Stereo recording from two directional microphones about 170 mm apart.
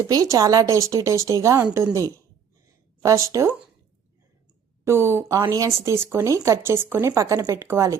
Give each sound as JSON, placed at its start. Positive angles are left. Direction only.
{"t": 0.0, "sound": "speech", "side_deg": -20}
{"t": 2.6, "sound": "a sound", "side_deg": -20}
{"t": 4.9, "sound": "speech", "side_deg": -15}